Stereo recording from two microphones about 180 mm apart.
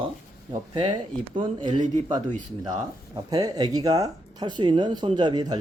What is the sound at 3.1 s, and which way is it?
Speech, 20° right (ahead or behind).